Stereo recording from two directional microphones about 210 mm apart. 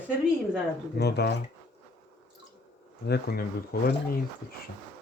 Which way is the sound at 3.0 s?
50° left (ahead or behind).